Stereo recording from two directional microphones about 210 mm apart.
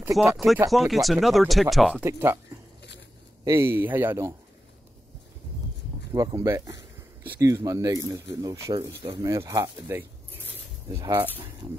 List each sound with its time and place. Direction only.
0.0 s speech: 5° right (ahead or behind)
3.4 s speech: 10° right (ahead or behind)
6.1 s speech: 15° right (ahead or behind)